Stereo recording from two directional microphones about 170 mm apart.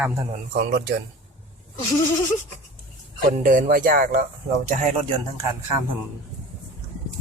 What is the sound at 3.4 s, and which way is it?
Speech, 55° right (ahead or behind).